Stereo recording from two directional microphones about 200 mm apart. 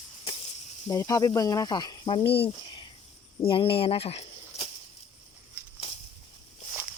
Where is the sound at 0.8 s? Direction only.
15° left (ahead or behind).